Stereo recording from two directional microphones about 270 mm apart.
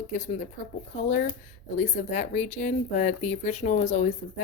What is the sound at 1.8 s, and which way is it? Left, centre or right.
A woman's voice, left.